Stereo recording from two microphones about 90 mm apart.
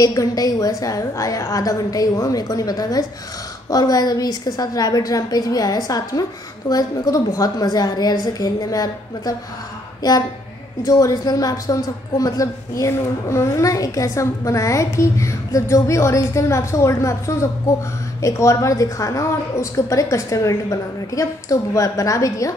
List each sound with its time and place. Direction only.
0.0 s a woman's voice: 45° left (ahead or behind)